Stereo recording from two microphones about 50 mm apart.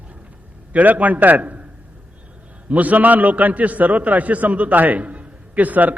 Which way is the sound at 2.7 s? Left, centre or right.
Right.